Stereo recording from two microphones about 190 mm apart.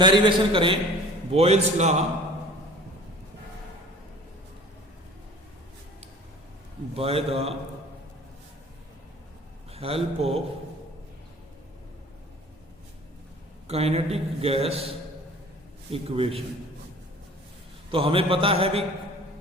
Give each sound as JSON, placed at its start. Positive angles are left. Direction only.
{"t": 0.0, "sound": "a man's voice", "side_deg": -25}
{"t": 6.9, "sound": "a man's voice", "side_deg": -30}
{"t": 9.7, "sound": "a man's voice", "side_deg": -30}
{"t": 13.7, "sound": "a man's voice", "side_deg": -30}
{"t": 17.9, "sound": "a man's voice", "side_deg": -30}